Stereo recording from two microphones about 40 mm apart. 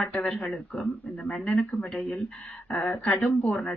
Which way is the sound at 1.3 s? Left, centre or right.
Left.